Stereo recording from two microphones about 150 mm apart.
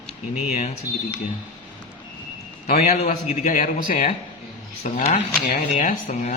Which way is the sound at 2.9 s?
50° left (ahead or behind).